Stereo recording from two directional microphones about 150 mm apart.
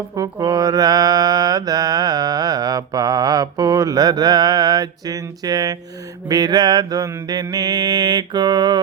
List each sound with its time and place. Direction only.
0.2 s music: 25° right (ahead or behind)